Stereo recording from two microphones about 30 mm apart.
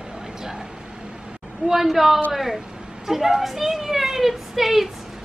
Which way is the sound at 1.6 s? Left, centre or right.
Centre.